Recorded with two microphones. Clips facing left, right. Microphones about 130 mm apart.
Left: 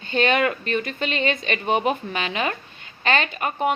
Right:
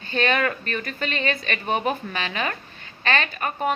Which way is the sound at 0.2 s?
25° left (ahead or behind).